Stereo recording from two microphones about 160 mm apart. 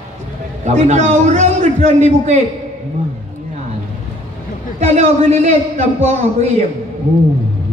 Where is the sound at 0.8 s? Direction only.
45° right (ahead or behind).